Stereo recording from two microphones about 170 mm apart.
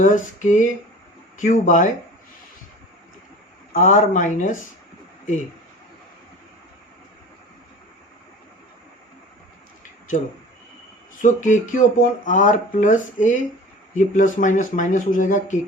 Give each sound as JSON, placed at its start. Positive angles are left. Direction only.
{"t": 0.0, "sound": "speech", "side_deg": 50}
{"t": 3.7, "sound": "speech", "side_deg": 50}
{"t": 11.2, "sound": "speech", "side_deg": 50}